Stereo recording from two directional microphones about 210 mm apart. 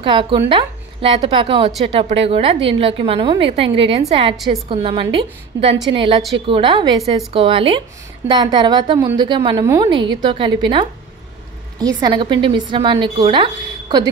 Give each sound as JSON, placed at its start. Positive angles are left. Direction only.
{"t": 0.0, "sound": "a woman's voice", "side_deg": -25}
{"t": 12.0, "sound": "a woman's voice", "side_deg": -20}